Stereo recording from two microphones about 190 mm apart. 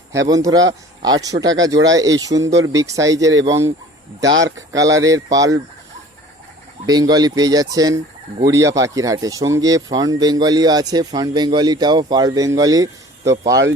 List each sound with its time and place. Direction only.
0.1 s speech: 20° right (ahead or behind)
6.8 s speech: 20° right (ahead or behind)